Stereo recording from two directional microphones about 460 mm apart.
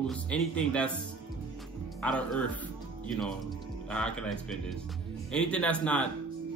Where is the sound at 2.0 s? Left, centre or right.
Centre.